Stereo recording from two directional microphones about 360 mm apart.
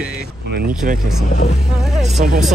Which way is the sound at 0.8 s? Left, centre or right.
Right.